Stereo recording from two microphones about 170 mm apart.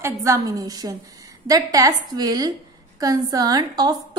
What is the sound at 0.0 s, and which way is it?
A woman's voice, 20° right (ahead or behind).